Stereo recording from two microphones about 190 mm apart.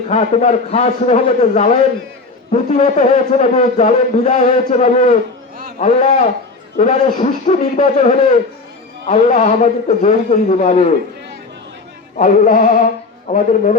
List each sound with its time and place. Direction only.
0.1 s a man's voice: 35° left (ahead or behind)
12.1 s a man's voice: 40° left (ahead or behind)